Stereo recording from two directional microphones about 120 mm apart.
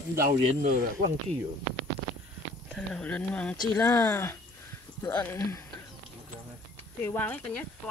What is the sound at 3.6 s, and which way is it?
Speech, 30° left (ahead or behind).